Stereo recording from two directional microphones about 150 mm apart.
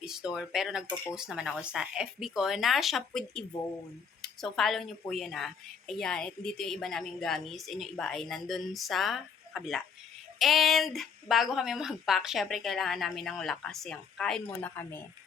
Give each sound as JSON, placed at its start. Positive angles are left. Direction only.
{"t": 0.0, "sound": "a woman's voice", "side_deg": -5}
{"t": 14.6, "sound": "a woman's voice", "side_deg": 15}